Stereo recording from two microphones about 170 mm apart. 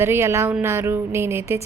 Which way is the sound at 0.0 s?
15° right (ahead or behind).